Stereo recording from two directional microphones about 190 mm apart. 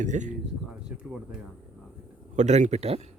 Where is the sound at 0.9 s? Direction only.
5° right (ahead or behind).